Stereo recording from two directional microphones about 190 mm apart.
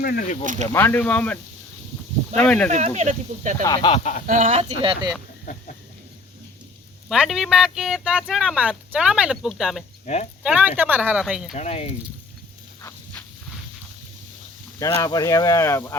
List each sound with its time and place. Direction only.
0.0 s speech: 50° left (ahead or behind)
0.7 s speech: 10° left (ahead or behind)
2.4 s speech: 5° left (ahead or behind)
2.6 s speech: 35° right (ahead or behind)
3.6 s speech: 20° left (ahead or behind)
4.3 s speech: 40° right (ahead or behind)
4.8 s speech: 25° right (ahead or behind)
7.1 s speech: centre (ahead or behind)
11.5 s speech: 35° left (ahead or behind)
14.8 s speech: 20° left (ahead or behind)